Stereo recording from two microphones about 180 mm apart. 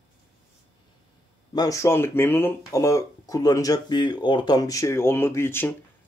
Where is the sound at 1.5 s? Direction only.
20° left (ahead or behind).